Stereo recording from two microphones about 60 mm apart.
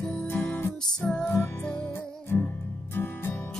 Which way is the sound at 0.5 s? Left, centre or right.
Left.